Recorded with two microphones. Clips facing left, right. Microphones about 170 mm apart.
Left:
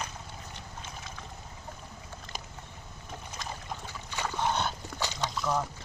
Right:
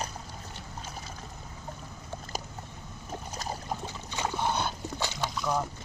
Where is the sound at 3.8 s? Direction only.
15° right (ahead or behind).